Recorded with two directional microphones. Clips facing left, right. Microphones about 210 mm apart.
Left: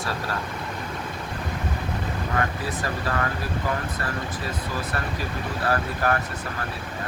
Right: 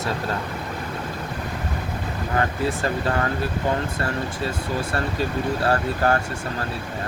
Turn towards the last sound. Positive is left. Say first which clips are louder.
# right 3 dB
turn(degrees=-30)  # may be behind; listen again after turning